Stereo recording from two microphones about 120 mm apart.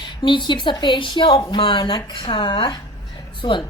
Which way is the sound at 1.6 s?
45° left (ahead or behind).